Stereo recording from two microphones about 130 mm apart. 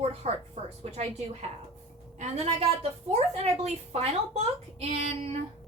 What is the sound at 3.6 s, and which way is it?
A woman's voice, 55° right (ahead or behind).